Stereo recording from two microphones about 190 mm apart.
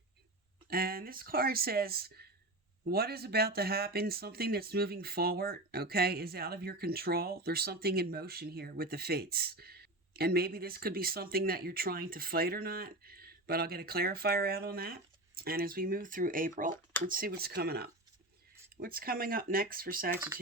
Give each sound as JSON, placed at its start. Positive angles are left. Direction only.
{"t": 0.7, "sound": "speech", "side_deg": -50}
{"t": 20.1, "sound": "speech", "side_deg": -10}